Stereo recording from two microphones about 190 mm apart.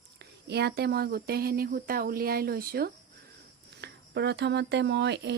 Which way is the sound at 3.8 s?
65° right (ahead or behind).